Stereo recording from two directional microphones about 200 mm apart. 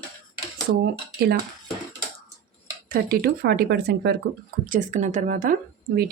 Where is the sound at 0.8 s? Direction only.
50° right (ahead or behind).